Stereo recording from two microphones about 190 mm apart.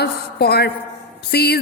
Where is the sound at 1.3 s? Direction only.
60° left (ahead or behind).